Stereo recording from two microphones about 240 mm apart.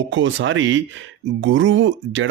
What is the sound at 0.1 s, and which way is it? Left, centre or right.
Speech, right.